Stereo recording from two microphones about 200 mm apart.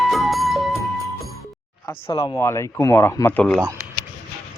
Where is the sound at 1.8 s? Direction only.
15° left (ahead or behind).